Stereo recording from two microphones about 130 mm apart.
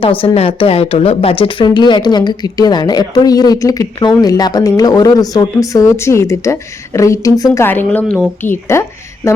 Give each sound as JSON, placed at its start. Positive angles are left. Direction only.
{"t": 0.0, "sound": "a woman's voice", "side_deg": 45}